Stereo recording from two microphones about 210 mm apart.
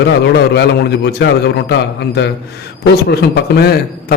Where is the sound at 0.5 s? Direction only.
50° left (ahead or behind).